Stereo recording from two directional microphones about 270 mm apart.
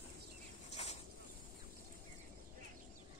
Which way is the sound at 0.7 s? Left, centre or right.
Left.